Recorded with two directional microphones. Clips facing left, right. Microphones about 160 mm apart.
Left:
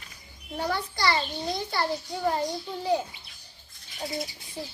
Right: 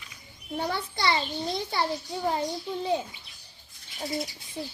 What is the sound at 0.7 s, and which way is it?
Speech, 20° right (ahead or behind).